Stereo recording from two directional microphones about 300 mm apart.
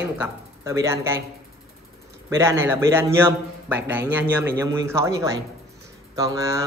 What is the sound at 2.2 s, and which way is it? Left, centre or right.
A man's voice, centre.